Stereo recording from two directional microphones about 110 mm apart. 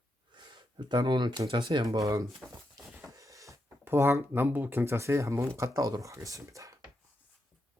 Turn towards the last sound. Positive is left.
turn(degrees=-30)  # may be behind; listen again after turning